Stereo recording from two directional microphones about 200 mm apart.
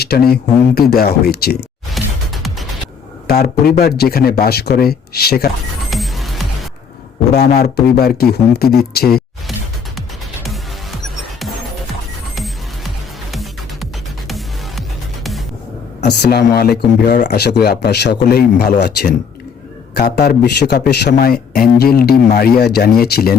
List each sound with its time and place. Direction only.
0.8 s speech: 50° left (ahead or behind)
1.9 s music: centre (ahead or behind)
3.2 s speech: 50° left (ahead or behind)
5.9 s music: centre (ahead or behind)
7.3 s speech: 50° left (ahead or behind)
14.3 s music: centre (ahead or behind)
16.0 s speech: 55° left (ahead or behind)